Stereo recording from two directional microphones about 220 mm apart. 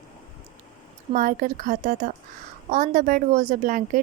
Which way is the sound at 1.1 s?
40° right (ahead or behind).